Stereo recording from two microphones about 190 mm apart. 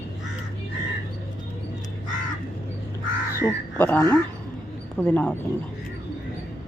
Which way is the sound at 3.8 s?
10° left (ahead or behind).